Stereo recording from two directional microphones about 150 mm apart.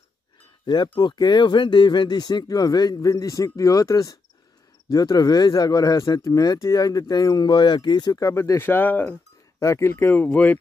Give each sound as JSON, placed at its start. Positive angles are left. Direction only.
{"t": 0.9, "sound": "speech", "side_deg": 30}